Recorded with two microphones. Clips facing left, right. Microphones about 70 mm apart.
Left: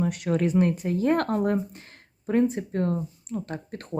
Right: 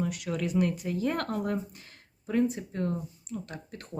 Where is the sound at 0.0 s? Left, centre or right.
Left.